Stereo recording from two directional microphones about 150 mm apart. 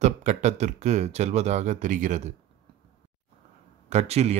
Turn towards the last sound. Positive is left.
turn(degrees=-45)  # may be behind; listen again after turning